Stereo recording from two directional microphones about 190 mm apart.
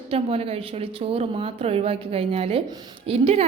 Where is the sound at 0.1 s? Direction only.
30° right (ahead or behind).